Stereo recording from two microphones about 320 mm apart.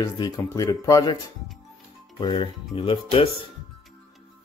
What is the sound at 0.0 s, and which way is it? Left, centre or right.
Speech, centre.